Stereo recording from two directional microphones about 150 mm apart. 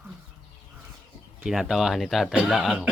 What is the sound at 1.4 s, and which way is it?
Speech, 5° right (ahead or behind).